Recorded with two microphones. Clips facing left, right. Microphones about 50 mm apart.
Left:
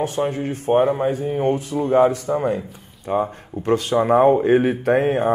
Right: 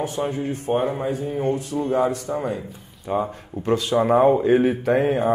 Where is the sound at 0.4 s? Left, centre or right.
Left.